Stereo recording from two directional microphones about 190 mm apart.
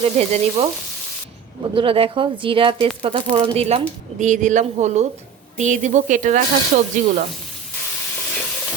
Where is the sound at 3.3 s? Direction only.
30° right (ahead or behind).